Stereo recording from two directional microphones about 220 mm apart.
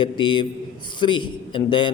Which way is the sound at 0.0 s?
20° left (ahead or behind).